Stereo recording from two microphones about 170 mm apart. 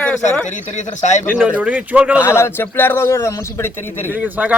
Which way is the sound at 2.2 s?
15° left (ahead or behind).